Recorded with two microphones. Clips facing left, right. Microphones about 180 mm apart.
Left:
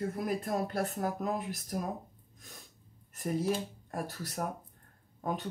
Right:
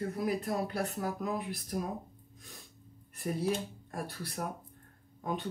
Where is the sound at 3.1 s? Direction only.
45° left (ahead or behind).